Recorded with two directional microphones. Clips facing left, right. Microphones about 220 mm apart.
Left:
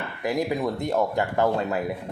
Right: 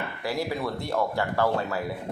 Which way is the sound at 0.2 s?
20° left (ahead or behind).